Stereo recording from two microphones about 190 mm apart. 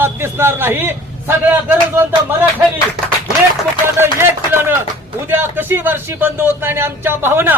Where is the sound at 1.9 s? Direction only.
10° right (ahead or behind).